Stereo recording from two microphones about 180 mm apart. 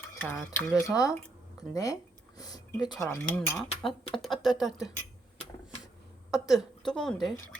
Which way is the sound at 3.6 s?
35° left (ahead or behind).